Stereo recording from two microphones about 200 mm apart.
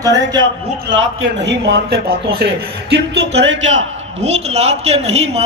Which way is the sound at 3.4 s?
65° right (ahead or behind).